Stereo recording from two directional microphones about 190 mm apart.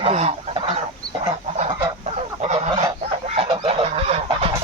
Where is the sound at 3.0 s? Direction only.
35° right (ahead or behind).